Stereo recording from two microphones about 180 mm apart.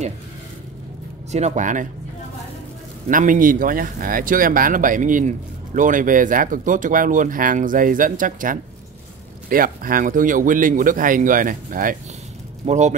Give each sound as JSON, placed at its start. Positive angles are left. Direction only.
{"t": 1.3, "sound": "speech", "side_deg": -40}
{"t": 3.1, "sound": "speech", "side_deg": -50}